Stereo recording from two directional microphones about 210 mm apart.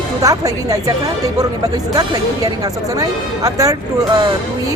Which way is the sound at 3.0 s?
15° right (ahead or behind).